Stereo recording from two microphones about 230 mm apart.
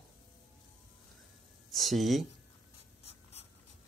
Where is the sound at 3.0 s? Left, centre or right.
Left.